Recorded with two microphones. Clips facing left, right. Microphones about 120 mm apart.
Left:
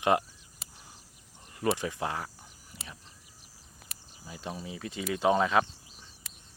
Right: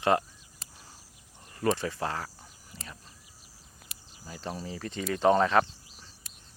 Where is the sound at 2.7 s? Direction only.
10° left (ahead or behind).